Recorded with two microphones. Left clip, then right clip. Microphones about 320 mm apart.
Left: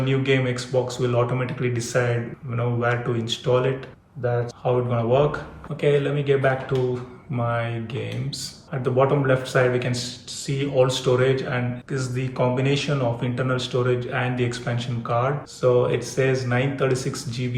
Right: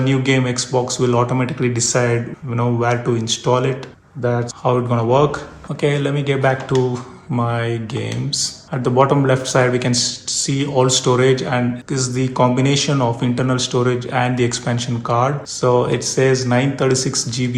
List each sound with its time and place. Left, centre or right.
0.0 s speech: centre